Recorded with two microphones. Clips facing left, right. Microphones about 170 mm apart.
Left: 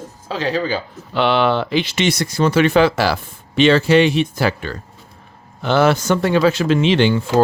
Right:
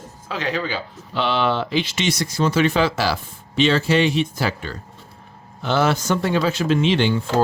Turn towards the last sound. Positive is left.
turn(degrees=85)